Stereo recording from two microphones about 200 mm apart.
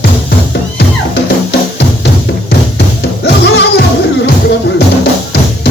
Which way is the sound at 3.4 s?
60° left (ahead or behind).